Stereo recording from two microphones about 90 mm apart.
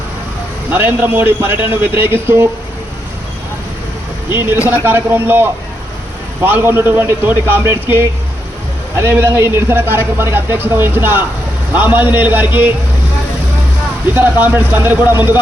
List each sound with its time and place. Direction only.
0.7 s speech: 20° right (ahead or behind)
4.9 s speech: 25° right (ahead or behind)
14.1 s speech: 20° right (ahead or behind)